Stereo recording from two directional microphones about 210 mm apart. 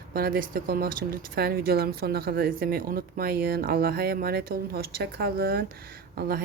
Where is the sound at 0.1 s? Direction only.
45° right (ahead or behind).